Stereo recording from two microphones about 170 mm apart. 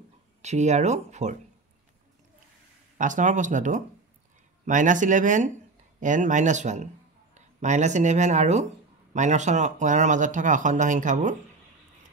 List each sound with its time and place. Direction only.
0.4 s speech: 45° right (ahead or behind)
3.0 s speech: 50° right (ahead or behind)